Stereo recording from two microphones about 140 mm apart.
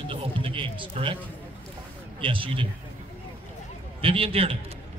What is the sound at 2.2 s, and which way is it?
Speech, 40° right (ahead or behind).